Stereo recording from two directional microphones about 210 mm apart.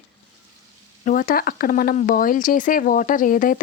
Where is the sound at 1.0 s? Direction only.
40° left (ahead or behind).